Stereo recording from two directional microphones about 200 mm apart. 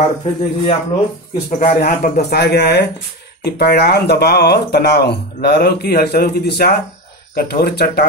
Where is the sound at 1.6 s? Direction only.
45° left (ahead or behind).